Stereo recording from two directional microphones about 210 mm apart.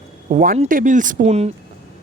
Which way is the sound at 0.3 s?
35° right (ahead or behind).